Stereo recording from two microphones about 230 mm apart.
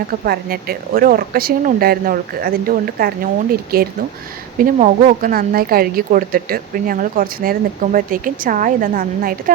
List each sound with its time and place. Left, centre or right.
0.1 s a woman's voice: right